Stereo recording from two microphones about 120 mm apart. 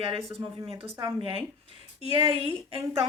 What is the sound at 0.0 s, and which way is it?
Speech, 50° right (ahead or behind).